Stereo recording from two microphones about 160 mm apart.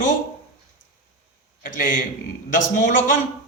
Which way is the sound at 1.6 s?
60° left (ahead or behind).